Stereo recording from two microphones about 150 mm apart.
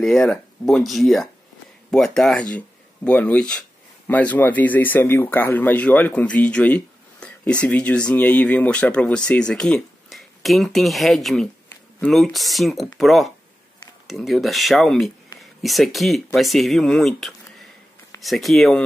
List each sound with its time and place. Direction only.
0.0 s speech: centre (ahead or behind)